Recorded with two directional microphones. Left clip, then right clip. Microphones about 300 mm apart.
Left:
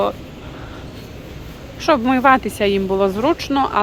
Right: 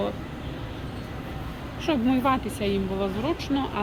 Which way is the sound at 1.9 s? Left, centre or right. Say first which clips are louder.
Left 11 dB; centre.